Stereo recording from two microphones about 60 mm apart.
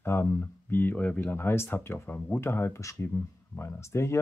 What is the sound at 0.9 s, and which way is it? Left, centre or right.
Speech, left.